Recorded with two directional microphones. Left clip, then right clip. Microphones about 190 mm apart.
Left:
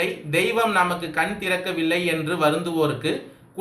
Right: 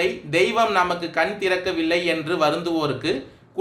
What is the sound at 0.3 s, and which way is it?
A man's voice, 50° right (ahead or behind).